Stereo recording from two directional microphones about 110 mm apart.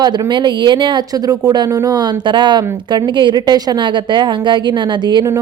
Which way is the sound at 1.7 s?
25° right (ahead or behind).